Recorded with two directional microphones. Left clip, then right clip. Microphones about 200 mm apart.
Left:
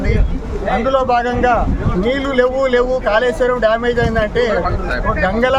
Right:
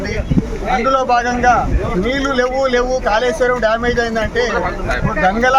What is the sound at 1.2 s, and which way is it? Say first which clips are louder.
Speech: right 1 dB; 25° left (ahead or behind).